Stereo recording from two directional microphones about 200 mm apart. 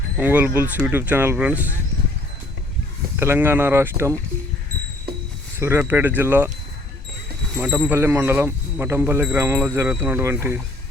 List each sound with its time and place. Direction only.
0.2 s speech: 10° right (ahead or behind)
3.2 s speech: 10° right (ahead or behind)
5.5 s speech: 15° right (ahead or behind)
7.5 s speech: 5° right (ahead or behind)